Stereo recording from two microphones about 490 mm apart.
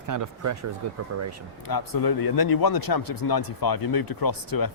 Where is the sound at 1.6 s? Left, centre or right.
Left.